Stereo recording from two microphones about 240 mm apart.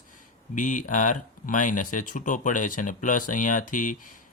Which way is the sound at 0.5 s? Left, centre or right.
Left.